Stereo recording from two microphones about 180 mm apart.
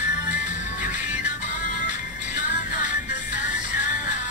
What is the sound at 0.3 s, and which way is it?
Music, 45° left (ahead or behind).